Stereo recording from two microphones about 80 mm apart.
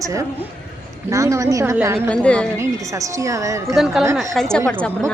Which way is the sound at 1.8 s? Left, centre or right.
Right.